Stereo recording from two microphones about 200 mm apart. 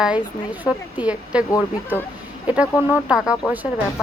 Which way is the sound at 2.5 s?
5° right (ahead or behind).